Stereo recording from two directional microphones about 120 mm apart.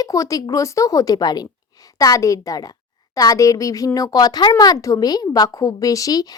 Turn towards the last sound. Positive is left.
turn(degrees=30)  # may be behind; listen again after turning